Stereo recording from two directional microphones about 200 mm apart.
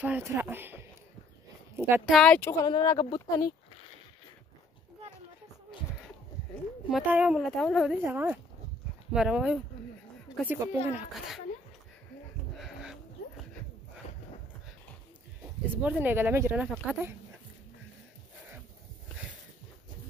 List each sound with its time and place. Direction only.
0.0 s speech: 10° right (ahead or behind)
2.1 s speech: 5° left (ahead or behind)
6.9 s a woman's voice: 5° right (ahead or behind)
8.0 s a woman's voice: 10° right (ahead or behind)
12.5 s dog: centre (ahead or behind)
15.7 s speech: 10° right (ahead or behind)